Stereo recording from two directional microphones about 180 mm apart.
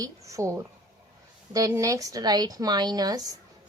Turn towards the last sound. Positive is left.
turn(degrees=-20)  # may be behind; listen again after turning